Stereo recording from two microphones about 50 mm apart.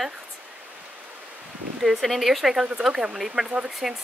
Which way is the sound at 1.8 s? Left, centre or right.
Centre.